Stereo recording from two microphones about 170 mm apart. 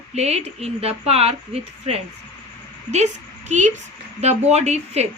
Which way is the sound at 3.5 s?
45° right (ahead or behind).